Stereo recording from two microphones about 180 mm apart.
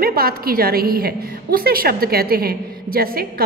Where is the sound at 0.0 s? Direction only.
55° right (ahead or behind).